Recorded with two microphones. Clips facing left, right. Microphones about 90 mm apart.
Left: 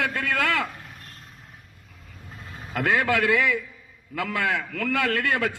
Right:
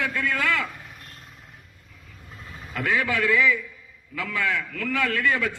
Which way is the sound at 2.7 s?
50° left (ahead or behind).